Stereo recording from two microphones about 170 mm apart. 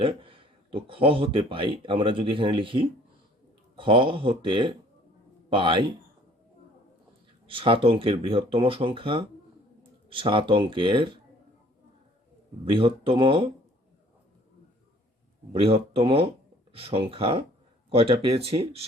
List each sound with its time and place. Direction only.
0.0 s speech: 30° right (ahead or behind)
7.4 s speech: 30° right (ahead or behind)
12.6 s speech: 30° right (ahead or behind)
15.5 s speech: 35° right (ahead or behind)